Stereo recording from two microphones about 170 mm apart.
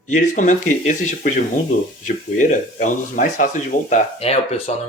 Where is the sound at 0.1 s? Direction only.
45° left (ahead or behind).